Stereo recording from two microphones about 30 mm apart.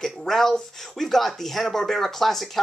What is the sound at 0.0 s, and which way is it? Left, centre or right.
Speech, centre.